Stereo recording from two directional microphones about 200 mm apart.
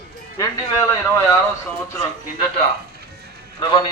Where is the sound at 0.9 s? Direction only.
15° left (ahead or behind).